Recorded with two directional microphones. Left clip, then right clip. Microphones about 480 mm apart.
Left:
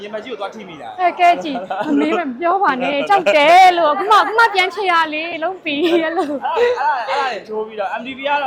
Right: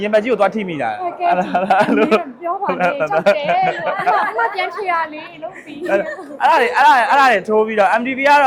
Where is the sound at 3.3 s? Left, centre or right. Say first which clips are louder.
Left 8 dB; left.